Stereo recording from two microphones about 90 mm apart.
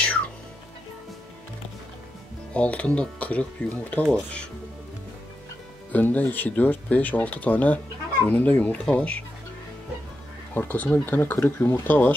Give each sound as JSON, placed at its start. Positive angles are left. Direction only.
{"t": 2.5, "sound": "speech", "side_deg": 15}
{"t": 5.9, "sound": "speech", "side_deg": 20}
{"t": 10.5, "sound": "speech", "side_deg": 20}